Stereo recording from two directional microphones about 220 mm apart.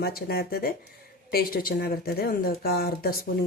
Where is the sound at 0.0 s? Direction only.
45° left (ahead or behind).